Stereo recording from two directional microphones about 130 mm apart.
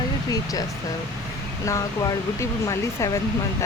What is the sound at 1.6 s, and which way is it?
Speech, 25° left (ahead or behind).